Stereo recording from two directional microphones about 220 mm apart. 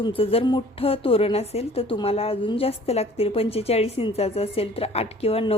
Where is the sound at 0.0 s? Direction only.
25° left (ahead or behind).